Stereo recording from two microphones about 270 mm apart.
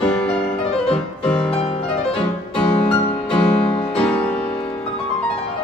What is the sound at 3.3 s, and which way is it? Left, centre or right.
Music, centre.